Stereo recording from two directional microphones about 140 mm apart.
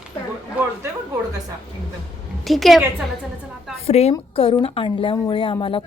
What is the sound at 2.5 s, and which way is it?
Speech, centre (ahead or behind).